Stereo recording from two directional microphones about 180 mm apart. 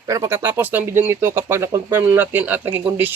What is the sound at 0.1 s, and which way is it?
Speech, 15° right (ahead or behind).